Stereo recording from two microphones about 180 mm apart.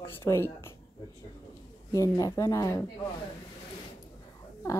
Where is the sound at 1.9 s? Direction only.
20° left (ahead or behind).